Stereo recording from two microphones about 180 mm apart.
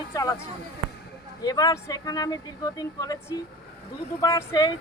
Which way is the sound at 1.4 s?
20° left (ahead or behind).